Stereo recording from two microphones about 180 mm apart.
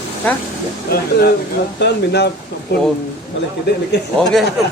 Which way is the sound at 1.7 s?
70° left (ahead or behind).